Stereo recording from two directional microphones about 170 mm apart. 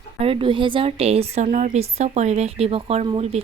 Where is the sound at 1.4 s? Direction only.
50° right (ahead or behind).